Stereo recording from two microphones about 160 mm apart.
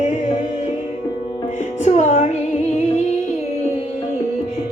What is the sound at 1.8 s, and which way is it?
Music, 45° left (ahead or behind).